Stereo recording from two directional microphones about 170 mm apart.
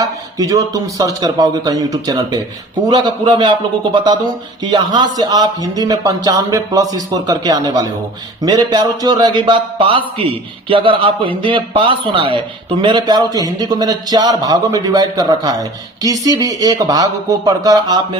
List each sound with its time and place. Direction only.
0.0 s a man's voice: 20° right (ahead or behind)